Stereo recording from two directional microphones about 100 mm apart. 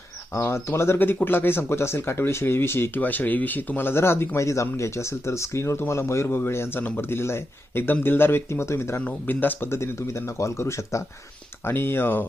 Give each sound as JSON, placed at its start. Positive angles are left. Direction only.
{"t": 0.3, "sound": "speech", "side_deg": 25}